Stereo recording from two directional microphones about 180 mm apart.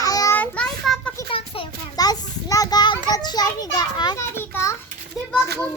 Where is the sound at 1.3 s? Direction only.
30° left (ahead or behind); by 4.8 s 15° left (ahead or behind).